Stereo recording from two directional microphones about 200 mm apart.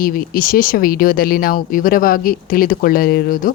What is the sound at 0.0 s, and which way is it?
A woman's voice, 45° left (ahead or behind).